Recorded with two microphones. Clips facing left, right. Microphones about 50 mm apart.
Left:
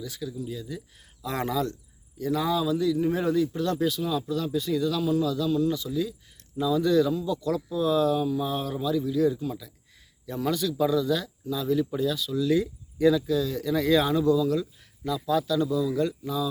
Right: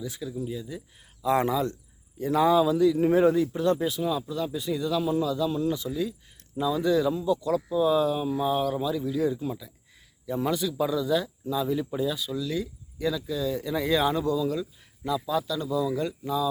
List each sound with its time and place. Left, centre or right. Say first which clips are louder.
0.0 s a man's voice: right 1 dB; right
3.5 s a man's voice: right 1 dB; centre
6.6 s speech: left 2 dB; centre
7.1 s a man's voice: right 2 dB; right
7.4 s a man's voice: right 1 dB; centre
12.4 s speech: left 6 dB; centre
13.2 s speech: left 3 dB; centre